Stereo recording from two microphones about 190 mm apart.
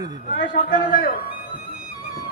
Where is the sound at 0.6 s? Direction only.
45° left (ahead or behind).